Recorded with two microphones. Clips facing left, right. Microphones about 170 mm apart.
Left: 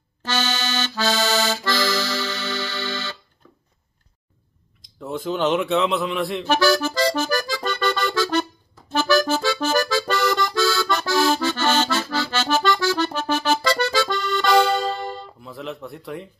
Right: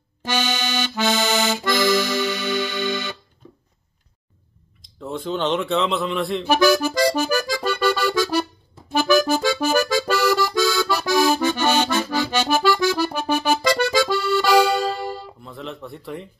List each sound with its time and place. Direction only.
0.2 s accordion: 15° right (ahead or behind)
5.0 s a man's voice: 5° left (ahead or behind)
6.4 s accordion: 15° right (ahead or behind)
10.5 s accordion: 15° right (ahead or behind)
15.4 s a sound: centre (ahead or behind)